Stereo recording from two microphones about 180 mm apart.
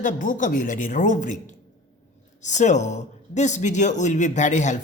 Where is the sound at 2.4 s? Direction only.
40° left (ahead or behind).